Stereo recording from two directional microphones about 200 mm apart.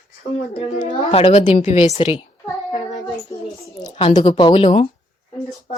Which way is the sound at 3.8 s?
30° left (ahead or behind).